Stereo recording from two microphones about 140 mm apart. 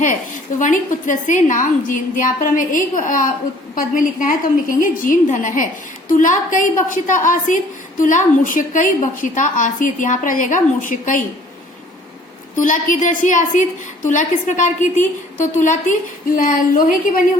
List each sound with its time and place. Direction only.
0.6 s a woman's voice: 65° left (ahead or behind)
12.5 s a woman's voice: 65° left (ahead or behind)